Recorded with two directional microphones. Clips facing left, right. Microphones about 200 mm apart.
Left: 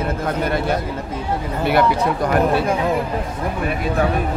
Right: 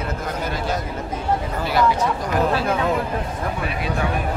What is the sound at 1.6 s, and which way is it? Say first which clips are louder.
Speech: left 5 dB; 60° left (ahead or behind).